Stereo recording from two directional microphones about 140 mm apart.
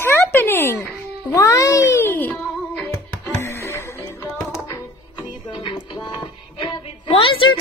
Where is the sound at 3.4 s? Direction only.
20° left (ahead or behind).